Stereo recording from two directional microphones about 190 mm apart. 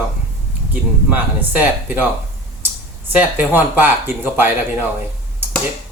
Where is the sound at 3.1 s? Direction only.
10° right (ahead or behind).